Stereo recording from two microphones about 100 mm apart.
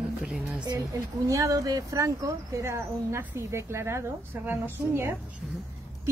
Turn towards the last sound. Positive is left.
turn(degrees=-20)  # may be behind; listen again after turning